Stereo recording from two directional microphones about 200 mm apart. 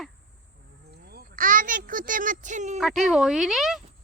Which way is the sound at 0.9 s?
50° right (ahead or behind).